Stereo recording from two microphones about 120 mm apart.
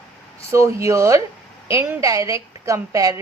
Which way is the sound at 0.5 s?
25° right (ahead or behind).